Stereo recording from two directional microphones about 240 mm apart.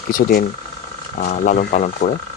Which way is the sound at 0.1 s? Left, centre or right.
Left.